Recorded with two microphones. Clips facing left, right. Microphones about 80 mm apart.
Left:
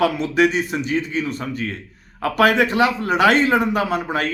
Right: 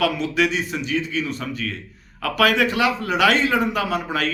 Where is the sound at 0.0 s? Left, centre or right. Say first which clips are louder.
Left 3 dB; left.